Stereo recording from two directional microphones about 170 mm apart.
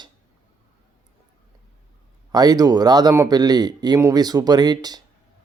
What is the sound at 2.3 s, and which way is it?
Speech, 20° right (ahead or behind).